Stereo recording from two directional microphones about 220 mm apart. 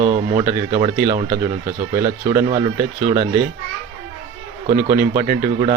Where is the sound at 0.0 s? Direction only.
30° right (ahead or behind).